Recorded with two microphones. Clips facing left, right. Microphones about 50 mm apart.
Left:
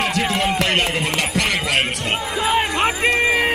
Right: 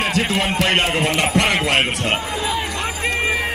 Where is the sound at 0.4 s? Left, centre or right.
Right.